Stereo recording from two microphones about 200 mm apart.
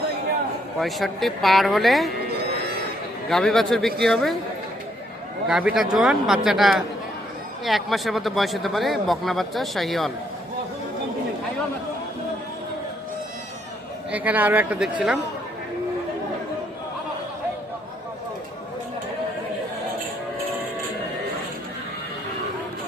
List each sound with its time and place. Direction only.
0.8 s speech: centre (ahead or behind)
3.2 s speech: centre (ahead or behind)
5.5 s speech: 5° right (ahead or behind)
14.1 s speech: 10° right (ahead or behind)